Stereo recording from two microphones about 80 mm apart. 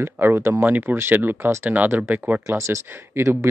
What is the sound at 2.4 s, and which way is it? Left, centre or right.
Speech, right.